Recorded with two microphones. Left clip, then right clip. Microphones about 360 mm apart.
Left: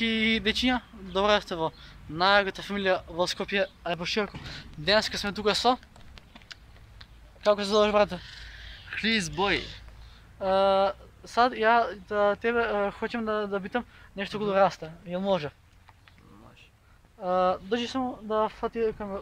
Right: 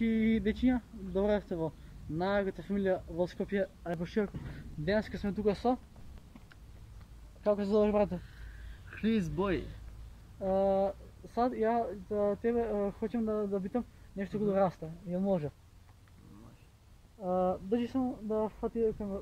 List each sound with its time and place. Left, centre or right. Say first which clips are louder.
0.0 s speech: left 6 dB; left
17.2 s speech: left 6 dB; left